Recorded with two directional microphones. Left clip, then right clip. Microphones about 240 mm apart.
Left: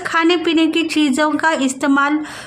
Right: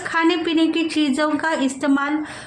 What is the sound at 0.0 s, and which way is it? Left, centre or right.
A woman's voice, left.